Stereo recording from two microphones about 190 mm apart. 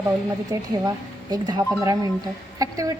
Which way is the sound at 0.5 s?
20° right (ahead or behind).